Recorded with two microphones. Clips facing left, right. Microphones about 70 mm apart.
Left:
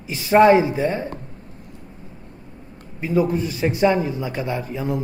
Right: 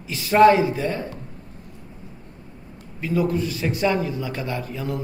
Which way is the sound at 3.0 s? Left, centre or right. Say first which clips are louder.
Left 2 dB; left.